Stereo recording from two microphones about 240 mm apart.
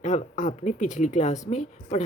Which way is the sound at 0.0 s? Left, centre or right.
Left.